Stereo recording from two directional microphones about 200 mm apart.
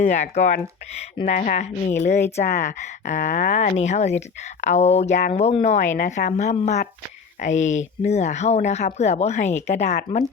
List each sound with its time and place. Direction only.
0.0 s speech: 35° left (ahead or behind)